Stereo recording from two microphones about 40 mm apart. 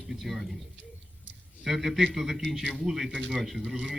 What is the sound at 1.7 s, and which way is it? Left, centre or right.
Speech, centre.